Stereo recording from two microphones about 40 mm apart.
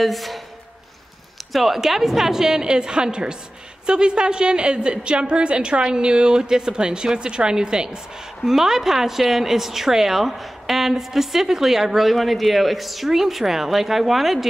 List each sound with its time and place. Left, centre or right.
0.0 s speech: centre
1.5 s a woman's voice: centre